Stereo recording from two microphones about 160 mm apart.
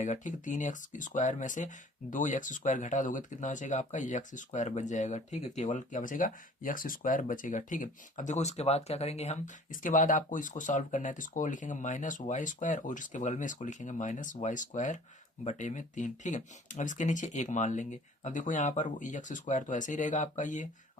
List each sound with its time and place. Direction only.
0.0 s speech: 50° left (ahead or behind)
9.8 s speech: 55° left (ahead or behind)